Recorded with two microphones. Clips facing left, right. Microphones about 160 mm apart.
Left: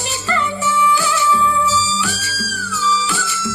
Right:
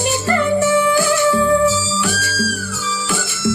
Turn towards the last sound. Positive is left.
turn(degrees=-50)  # may be behind; listen again after turning